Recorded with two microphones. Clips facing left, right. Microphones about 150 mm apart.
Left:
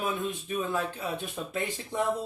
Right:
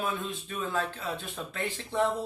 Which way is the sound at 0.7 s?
15° left (ahead or behind).